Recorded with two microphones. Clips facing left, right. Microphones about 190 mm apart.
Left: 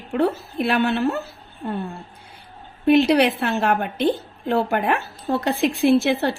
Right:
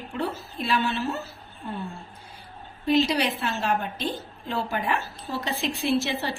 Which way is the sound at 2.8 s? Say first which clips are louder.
Left 7 dB; 60° left (ahead or behind).